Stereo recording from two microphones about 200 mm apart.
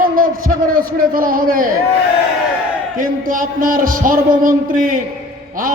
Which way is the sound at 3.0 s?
45° right (ahead or behind).